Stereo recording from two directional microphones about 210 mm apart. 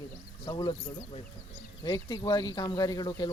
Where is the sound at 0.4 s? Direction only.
20° left (ahead or behind).